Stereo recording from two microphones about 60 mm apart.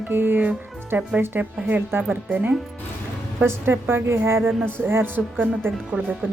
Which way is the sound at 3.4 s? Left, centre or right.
Right.